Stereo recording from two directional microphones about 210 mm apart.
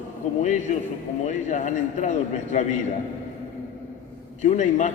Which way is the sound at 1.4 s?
35° left (ahead or behind).